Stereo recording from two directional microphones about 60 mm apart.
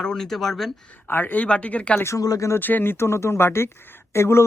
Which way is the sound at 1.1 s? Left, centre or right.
Left.